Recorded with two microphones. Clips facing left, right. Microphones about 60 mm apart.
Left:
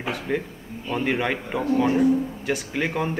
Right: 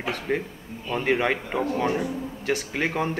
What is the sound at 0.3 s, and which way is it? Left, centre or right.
Speech, centre.